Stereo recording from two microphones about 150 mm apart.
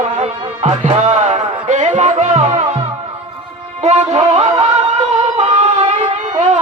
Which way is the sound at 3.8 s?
50° right (ahead or behind).